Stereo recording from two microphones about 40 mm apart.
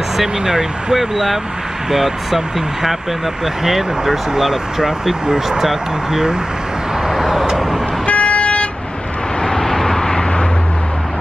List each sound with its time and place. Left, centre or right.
0.2 s speech: centre
7.1 s vehicle: centre
8.1 s vehicle: left
9.4 s vehicle: centre